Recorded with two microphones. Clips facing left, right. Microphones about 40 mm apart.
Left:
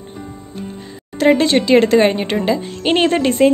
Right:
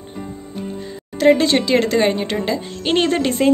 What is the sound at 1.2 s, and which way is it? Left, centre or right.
Speech, centre.